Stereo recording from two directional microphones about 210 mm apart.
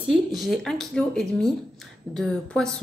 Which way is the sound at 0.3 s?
Centre (ahead or behind).